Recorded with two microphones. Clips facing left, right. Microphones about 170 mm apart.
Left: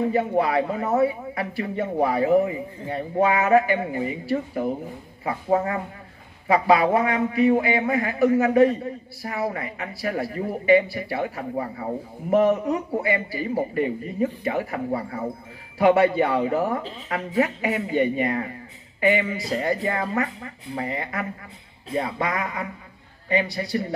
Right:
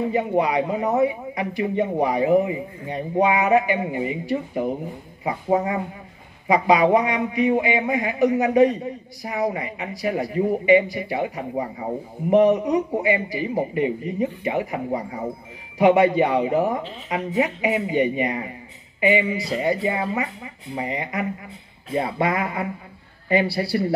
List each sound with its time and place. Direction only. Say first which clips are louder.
0.1 s speech: right 1 dB; 15° right (ahead or behind)
21.9 s speech: right 3 dB; 25° right (ahead or behind)